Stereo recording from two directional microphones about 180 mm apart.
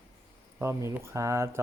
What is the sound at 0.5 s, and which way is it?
Speech, 15° right (ahead or behind).